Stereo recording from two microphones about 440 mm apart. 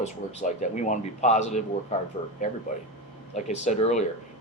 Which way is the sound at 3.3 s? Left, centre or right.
Centre.